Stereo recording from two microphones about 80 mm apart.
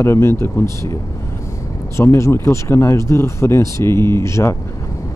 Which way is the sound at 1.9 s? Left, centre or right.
Left.